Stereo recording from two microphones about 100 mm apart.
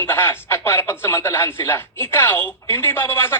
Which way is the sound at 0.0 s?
25° left (ahead or behind).